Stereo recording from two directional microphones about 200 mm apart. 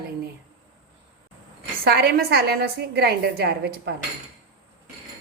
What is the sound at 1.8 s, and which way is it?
A woman's voice, 50° right (ahead or behind).